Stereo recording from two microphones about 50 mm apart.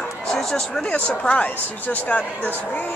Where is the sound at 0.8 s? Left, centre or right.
Left.